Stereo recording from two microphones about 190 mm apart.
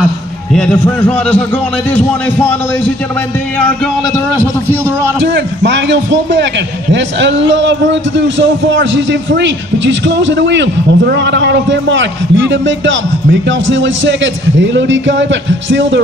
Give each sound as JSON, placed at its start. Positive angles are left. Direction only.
{"t": 0.5, "sound": "a man's voice", "side_deg": 5}
{"t": 5.2, "sound": "a man's voice", "side_deg": -65}